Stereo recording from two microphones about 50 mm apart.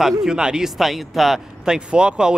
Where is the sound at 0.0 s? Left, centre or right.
Centre.